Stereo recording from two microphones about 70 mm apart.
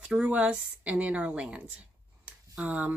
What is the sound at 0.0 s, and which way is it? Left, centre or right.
Speech, centre.